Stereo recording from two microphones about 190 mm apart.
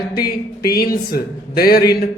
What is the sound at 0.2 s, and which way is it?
A man's voice, 55° left (ahead or behind).